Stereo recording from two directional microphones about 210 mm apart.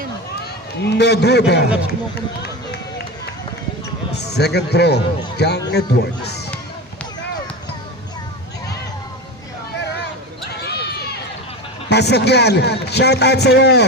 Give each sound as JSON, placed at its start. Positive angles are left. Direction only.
{"t": 0.3, "sound": "a man's voice", "side_deg": 50}
{"t": 4.1, "sound": "a man's voice", "side_deg": 50}
{"t": 10.5, "sound": "a sound", "side_deg": 50}
{"t": 11.9, "sound": "a man's voice", "side_deg": 55}